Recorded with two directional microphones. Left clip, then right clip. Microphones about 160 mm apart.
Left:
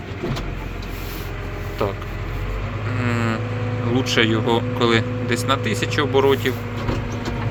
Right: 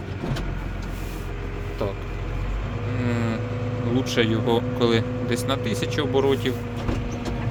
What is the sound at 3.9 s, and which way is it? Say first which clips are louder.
Speech: left 4 dB; 10° right (ahead or behind).